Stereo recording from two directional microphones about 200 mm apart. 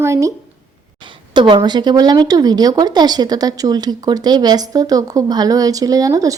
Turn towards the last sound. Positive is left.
turn(degrees=-15)  # may be behind; listen again after turning